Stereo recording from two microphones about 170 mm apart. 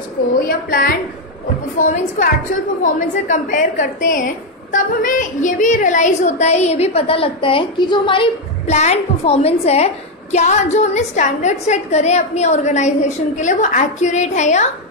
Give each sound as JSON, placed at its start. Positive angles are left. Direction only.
{"t": 0.5, "sound": "a woman's voice", "side_deg": 60}